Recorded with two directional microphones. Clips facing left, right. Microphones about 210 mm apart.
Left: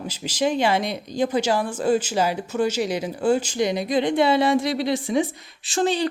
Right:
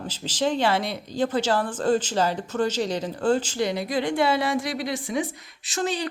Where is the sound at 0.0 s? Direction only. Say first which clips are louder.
Left 2 dB; 10° left (ahead or behind).